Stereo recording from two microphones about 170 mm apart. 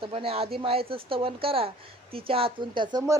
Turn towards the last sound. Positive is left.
turn(degrees=-20)  # may be behind; listen again after turning